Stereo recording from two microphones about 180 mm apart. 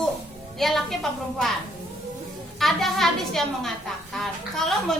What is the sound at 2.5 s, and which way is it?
A woman's voice, centre (ahead or behind).